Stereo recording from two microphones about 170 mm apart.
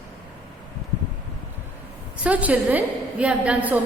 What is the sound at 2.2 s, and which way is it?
Mantra, 10° right (ahead or behind).